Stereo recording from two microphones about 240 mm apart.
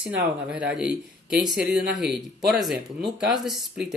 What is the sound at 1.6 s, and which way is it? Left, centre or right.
Speech, right.